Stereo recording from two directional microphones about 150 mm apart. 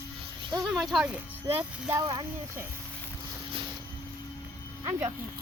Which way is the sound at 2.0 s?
25° right (ahead or behind).